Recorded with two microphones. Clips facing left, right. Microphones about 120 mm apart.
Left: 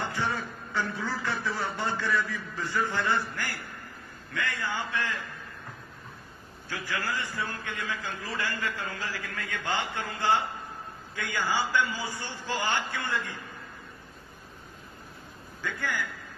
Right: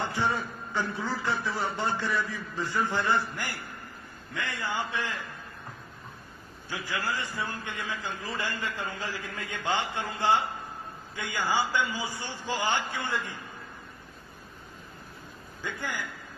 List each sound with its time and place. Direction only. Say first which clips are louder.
0.0 s a man's voice: right 2 dB; 20° right (ahead or behind)
6.7 s a man's voice: even; 15° right (ahead or behind)
15.6 s a man's voice: left 2 dB; 15° right (ahead or behind)